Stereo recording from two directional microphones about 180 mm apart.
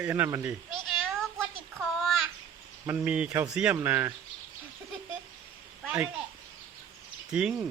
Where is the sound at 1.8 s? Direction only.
Centre (ahead or behind).